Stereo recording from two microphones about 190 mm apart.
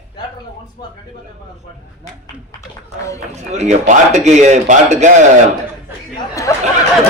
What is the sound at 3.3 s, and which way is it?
A man's voice, 35° right (ahead or behind).